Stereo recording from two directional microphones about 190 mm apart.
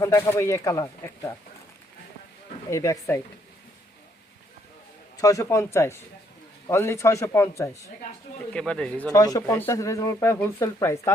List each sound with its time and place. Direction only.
0.0 s speech: 15° left (ahead or behind)
2.6 s speech: 15° left (ahead or behind)
5.1 s speech: 15° left (ahead or behind)
8.5 s speech: 5° left (ahead or behind)
9.1 s speech: 20° left (ahead or behind)